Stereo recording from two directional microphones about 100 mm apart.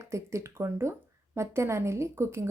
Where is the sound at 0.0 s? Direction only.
30° right (ahead or behind).